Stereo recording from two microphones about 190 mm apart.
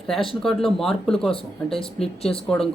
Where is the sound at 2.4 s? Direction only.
5° left (ahead or behind).